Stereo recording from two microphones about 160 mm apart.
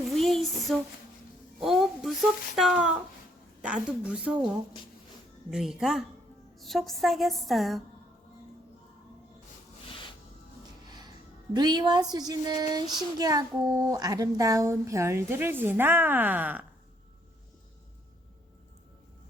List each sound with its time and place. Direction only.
0.1 s a sound: centre (ahead or behind)
1.6 s a woman's voice: centre (ahead or behind)
10.8 s music: 25° right (ahead or behind)
11.5 s speech: 25° right (ahead or behind); by 16.6 s 10° right (ahead or behind)